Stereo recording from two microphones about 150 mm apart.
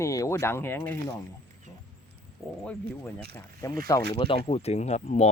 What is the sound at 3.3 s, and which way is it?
Speech, 20° left (ahead or behind).